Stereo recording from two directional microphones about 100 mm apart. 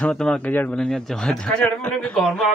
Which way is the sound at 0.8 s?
5° left (ahead or behind).